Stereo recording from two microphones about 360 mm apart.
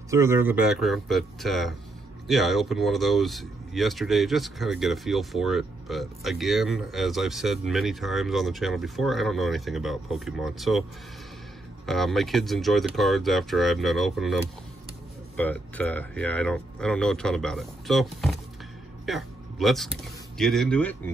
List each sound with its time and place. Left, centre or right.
0.1 s speech: centre
11.8 s speech: centre